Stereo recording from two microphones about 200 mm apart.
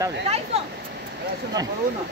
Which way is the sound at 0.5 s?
30° right (ahead or behind).